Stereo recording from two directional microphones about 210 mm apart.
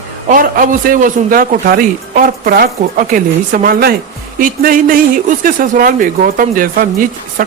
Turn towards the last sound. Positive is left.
turn(degrees=-45)  # may be behind; listen again after turning